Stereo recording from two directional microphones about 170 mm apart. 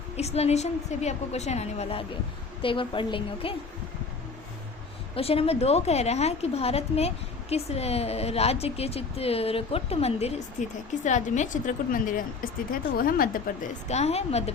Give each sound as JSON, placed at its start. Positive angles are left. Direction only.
{"t": 0.2, "sound": "speech", "side_deg": 40}
{"t": 5.1, "sound": "a woman's voice", "side_deg": 35}
{"t": 13.8, "sound": "speech", "side_deg": 40}